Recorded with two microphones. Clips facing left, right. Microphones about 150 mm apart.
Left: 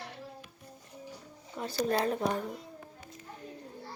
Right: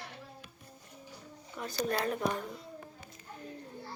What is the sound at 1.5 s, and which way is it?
Speech, 30° left (ahead or behind).